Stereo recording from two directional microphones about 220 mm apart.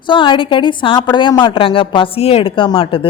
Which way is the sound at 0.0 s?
20° left (ahead or behind).